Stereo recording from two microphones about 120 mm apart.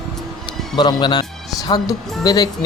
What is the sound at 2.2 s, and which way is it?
Speech, 35° left (ahead or behind).